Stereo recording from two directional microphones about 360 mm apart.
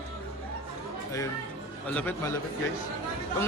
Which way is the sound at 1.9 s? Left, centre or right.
Centre.